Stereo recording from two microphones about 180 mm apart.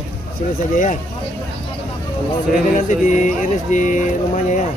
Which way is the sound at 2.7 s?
45° left (ahead or behind).